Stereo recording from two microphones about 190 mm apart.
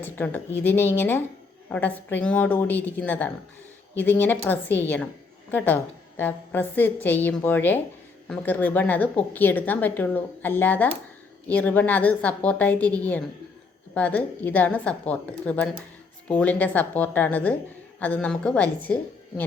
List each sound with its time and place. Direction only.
0.0 s a woman's voice: 10° left (ahead or behind)